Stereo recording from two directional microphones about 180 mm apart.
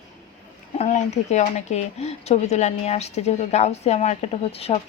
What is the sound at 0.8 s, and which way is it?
Speech, 40° left (ahead or behind).